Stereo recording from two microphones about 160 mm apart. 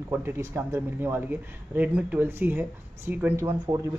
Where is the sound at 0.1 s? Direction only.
15° right (ahead or behind).